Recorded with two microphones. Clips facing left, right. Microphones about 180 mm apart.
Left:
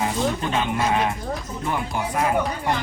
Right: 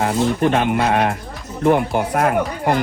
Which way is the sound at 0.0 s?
60° right (ahead or behind).